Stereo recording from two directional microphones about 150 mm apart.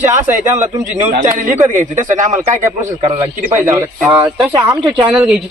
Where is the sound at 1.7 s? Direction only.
55° right (ahead or behind).